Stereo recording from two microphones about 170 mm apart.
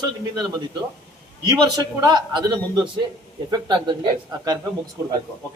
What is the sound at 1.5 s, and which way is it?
A man's voice, 25° right (ahead or behind).